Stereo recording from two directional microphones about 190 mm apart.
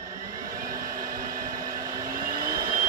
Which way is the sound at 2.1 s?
50° right (ahead or behind).